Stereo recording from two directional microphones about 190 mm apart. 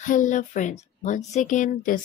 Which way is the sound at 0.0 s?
40° left (ahead or behind).